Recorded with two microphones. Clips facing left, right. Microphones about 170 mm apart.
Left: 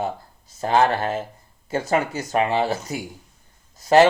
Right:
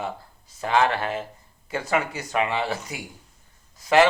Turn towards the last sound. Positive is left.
turn(degrees=40)  # may be behind; listen again after turning